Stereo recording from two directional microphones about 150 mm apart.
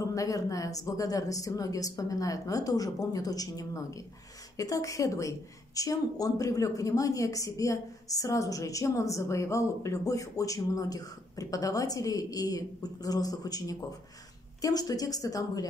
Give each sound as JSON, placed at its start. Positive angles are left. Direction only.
{"t": 0.0, "sound": "a woman's voice", "side_deg": 20}